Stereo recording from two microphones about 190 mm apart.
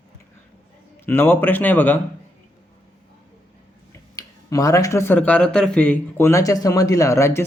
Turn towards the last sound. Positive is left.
turn(degrees=15)  # may be behind; listen again after turning